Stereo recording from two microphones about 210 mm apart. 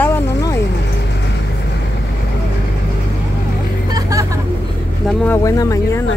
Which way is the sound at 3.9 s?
15° right (ahead or behind).